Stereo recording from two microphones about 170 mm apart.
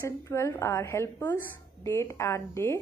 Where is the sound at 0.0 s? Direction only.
15° left (ahead or behind).